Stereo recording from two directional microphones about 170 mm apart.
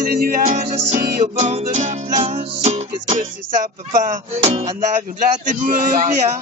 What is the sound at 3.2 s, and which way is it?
Music, 50° right (ahead or behind).